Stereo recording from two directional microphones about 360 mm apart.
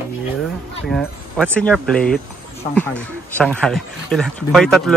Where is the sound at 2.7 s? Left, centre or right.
Centre.